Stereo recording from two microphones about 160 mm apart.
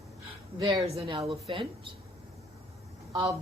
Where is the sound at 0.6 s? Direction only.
25° right (ahead or behind).